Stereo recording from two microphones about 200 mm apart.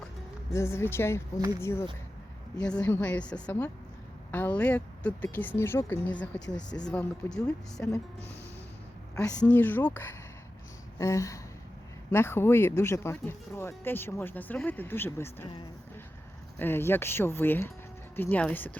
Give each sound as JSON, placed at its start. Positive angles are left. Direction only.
{"t": 0.5, "sound": "speech", "side_deg": 15}
{"t": 2.6, "sound": "a woman's voice", "side_deg": 5}
{"t": 6.7, "sound": "speech", "side_deg": 20}
{"t": 6.9, "sound": "a woman's voice", "side_deg": 5}
{"t": 9.2, "sound": "speech", "side_deg": 5}
{"t": 16.6, "sound": "speech", "side_deg": 10}